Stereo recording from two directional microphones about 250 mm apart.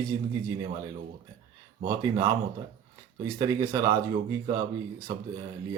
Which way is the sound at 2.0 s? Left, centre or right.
Centre.